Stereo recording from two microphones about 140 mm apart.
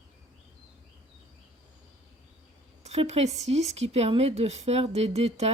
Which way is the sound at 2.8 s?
50° right (ahead or behind).